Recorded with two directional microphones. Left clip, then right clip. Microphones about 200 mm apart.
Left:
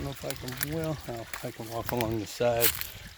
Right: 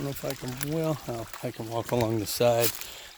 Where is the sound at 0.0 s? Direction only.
25° right (ahead or behind).